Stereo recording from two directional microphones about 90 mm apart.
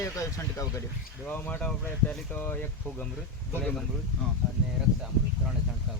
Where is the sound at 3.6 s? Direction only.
10° left (ahead or behind).